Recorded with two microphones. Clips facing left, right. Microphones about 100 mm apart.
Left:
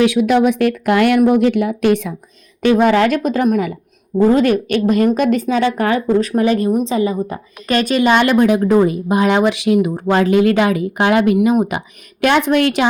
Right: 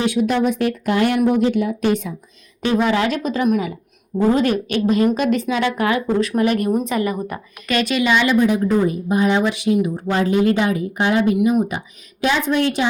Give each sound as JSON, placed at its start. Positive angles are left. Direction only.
{"t": 0.0, "sound": "a woman's voice", "side_deg": 90}
{"t": 2.7, "sound": "a woman's voice", "side_deg": 50}
{"t": 6.7, "sound": "a woman's voice", "side_deg": 20}
{"t": 7.7, "sound": "speech", "side_deg": 45}
{"t": 12.2, "sound": "a woman's voice", "side_deg": 65}